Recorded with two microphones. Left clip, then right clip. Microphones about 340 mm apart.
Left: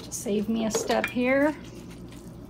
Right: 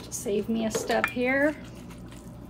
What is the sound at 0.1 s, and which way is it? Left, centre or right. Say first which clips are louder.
Speech: even; centre.